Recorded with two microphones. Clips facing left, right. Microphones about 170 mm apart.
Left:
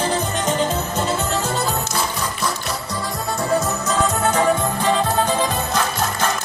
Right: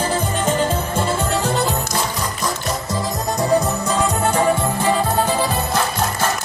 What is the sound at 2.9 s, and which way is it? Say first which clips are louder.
Music: right 3 dB; 20° right (ahead or behind).